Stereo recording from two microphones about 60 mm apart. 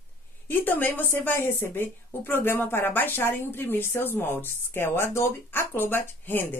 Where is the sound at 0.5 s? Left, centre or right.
Left.